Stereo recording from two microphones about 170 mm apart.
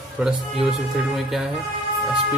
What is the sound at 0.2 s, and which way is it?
Speech, centre (ahead or behind).